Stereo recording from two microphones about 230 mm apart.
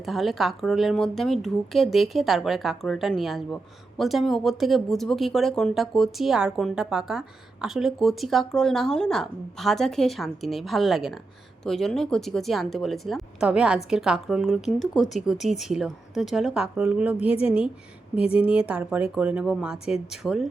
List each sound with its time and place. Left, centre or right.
0.0 s a woman's voice: centre
18.3 s a woman's voice: centre